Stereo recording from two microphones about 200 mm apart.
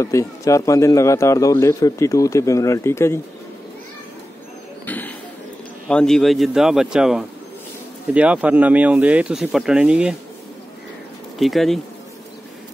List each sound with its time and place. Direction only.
0.0 s a man's voice: 15° left (ahead or behind)
4.8 s basketball bounce: 10° left (ahead or behind)
5.9 s a man's voice: 5° left (ahead or behind)
11.3 s a man's voice: centre (ahead or behind)